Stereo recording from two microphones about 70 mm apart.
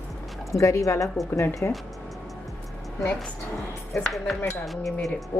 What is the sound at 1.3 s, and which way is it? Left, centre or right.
Speech, left.